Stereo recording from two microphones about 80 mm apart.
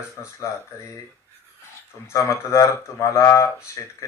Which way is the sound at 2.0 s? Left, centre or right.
Left.